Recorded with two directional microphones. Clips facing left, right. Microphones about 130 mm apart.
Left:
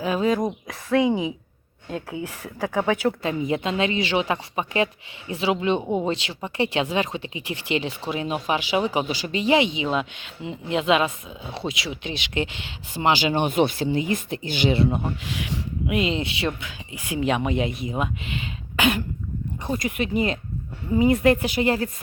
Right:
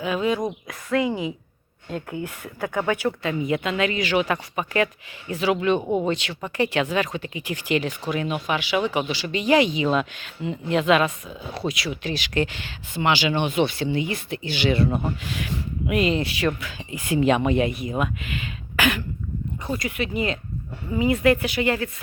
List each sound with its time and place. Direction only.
0.0 s speech: 35° left (ahead or behind)
0.4 s speech: 25° left (ahead or behind); by 2.2 s 10° left (ahead or behind)
2.7 s speech: 25° left (ahead or behind)
5.8 s speech: centre (ahead or behind)
6.1 s speech: 30° left (ahead or behind)
9.6 s speech: 20° left (ahead or behind)
12.9 s speech: 35° left (ahead or behind)
14.8 s speech: 10° left (ahead or behind)
17.1 s speech: 5° left (ahead or behind)
17.6 s speech: 20° left (ahead or behind); by 21.8 s 35° left (ahead or behind)